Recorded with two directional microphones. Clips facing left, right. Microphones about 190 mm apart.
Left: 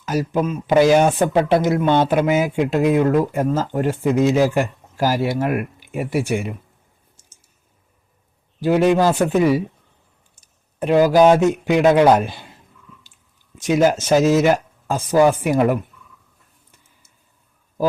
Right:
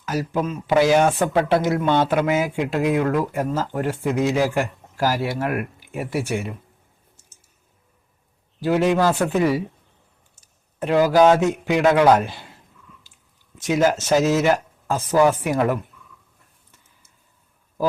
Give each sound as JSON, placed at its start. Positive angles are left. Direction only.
{"t": 0.0, "sound": "speech", "side_deg": 20}
{"t": 8.6, "sound": "a man's voice", "side_deg": 20}
{"t": 13.7, "sound": "speech", "side_deg": 15}